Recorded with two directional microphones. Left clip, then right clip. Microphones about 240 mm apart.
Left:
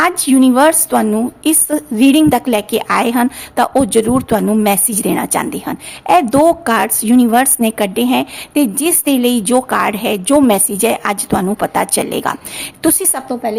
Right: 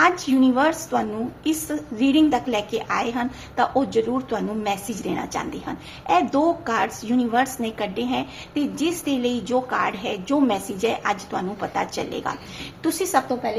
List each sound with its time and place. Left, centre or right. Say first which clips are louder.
0.0 s a woman's voice: left 6 dB; left